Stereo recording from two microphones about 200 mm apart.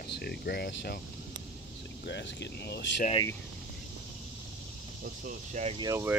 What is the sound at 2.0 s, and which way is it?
Speech, 60° left (ahead or behind).